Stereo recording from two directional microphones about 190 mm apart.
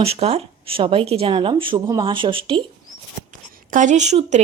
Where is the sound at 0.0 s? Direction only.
30° right (ahead or behind).